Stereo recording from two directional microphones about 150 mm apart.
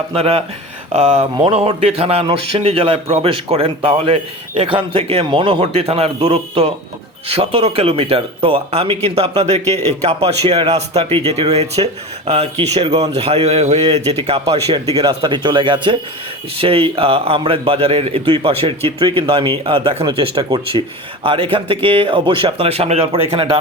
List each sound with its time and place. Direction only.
0.1 s speech: 40° right (ahead or behind)